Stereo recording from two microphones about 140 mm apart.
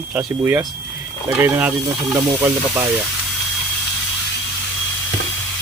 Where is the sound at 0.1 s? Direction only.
10° right (ahead or behind).